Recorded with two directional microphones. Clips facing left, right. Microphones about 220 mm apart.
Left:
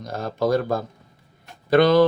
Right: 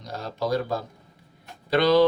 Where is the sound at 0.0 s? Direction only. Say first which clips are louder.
Left 6 dB; 50° left (ahead or behind).